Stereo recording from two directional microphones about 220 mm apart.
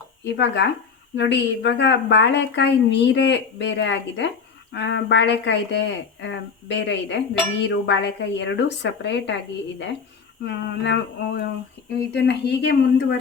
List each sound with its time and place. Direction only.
0.3 s a woman's voice: 50° left (ahead or behind)
10.4 s a woman's voice: 50° left (ahead or behind)